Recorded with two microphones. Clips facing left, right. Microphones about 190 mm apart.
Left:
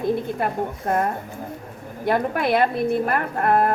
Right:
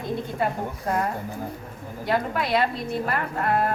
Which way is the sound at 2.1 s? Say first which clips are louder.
Left 4 dB; 55° left (ahead or behind).